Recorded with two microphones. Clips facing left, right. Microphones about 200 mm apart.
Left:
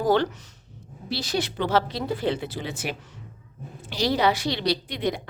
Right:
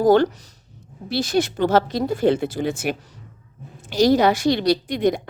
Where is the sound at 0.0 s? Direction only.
45° right (ahead or behind).